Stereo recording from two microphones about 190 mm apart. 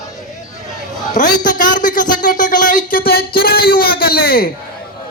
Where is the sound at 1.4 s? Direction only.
45° left (ahead or behind).